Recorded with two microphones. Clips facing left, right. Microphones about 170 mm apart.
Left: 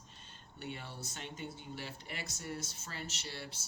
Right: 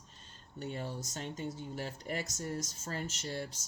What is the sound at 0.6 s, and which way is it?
Speech, 40° right (ahead or behind).